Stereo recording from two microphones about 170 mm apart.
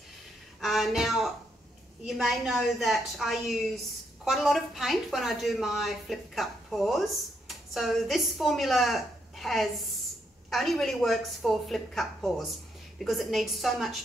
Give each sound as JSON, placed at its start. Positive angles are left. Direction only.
{"t": 0.6, "sound": "a woman's voice", "side_deg": 0}